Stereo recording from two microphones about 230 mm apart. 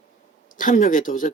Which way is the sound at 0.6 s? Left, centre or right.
Left.